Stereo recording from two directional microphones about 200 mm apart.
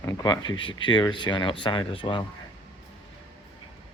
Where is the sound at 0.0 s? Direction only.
15° left (ahead or behind).